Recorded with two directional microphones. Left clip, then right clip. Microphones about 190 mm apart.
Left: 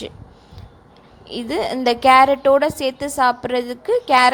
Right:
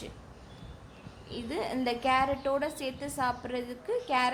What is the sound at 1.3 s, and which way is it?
A woman's voice, 35° left (ahead or behind).